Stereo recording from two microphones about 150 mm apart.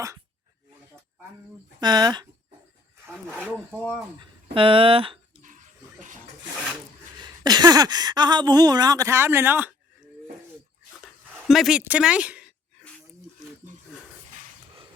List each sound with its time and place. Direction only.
1.8 s speech: 30° right (ahead or behind)
4.5 s speech: 35° right (ahead or behind)
7.3 s speech: 25° right (ahead or behind)
11.0 s dog: centre (ahead or behind)
11.8 s a woman's voice: 10° right (ahead or behind)